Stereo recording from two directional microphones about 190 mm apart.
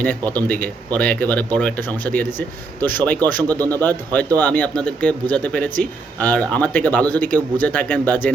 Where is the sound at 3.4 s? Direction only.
20° right (ahead or behind).